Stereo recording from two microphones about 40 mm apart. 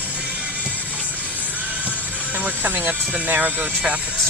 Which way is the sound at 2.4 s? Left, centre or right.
Right.